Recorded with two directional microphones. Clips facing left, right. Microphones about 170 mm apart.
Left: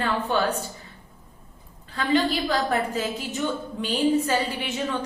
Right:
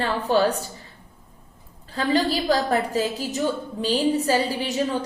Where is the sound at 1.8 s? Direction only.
35° right (ahead or behind).